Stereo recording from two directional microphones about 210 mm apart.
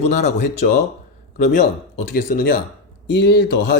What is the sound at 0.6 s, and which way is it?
Speech, 40° left (ahead or behind).